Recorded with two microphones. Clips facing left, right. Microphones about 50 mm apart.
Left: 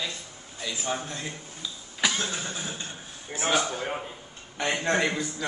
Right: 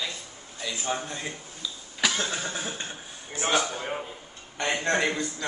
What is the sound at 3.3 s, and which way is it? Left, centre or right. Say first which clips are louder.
Speech: even; centre.